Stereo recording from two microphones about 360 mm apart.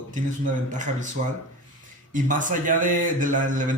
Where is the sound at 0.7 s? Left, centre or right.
Right.